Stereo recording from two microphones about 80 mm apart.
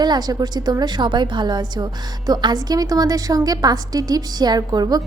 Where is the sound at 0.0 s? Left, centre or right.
Right.